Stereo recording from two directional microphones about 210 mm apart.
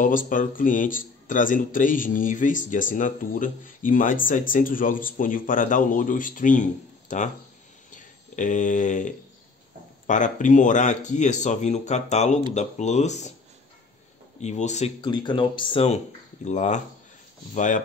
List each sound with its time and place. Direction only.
0.0 s speech: 40° left (ahead or behind)
7.9 s a sound: 35° left (ahead or behind)
10.0 s speech: 35° left (ahead or behind)
14.4 s speech: 35° left (ahead or behind)
15.0 s speech: 20° left (ahead or behind); by 17.8 s 35° left (ahead or behind)